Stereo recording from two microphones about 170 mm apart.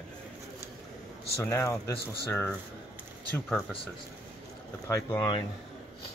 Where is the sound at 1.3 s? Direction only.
15° left (ahead or behind).